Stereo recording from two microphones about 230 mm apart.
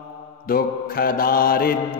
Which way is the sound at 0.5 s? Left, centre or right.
Left.